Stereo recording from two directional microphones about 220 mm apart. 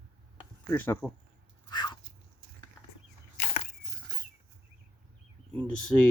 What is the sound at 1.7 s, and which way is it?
Dog, 20° left (ahead or behind).